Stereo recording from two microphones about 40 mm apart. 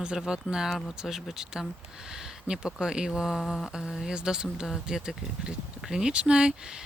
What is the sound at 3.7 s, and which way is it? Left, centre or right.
Speech, centre.